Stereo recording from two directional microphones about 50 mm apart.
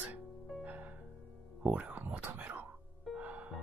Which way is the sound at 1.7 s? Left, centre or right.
Right.